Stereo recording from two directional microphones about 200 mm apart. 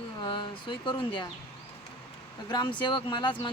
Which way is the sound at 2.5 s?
20° left (ahead or behind).